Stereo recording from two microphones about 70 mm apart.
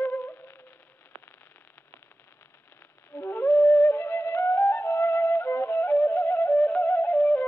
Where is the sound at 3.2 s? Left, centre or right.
Left.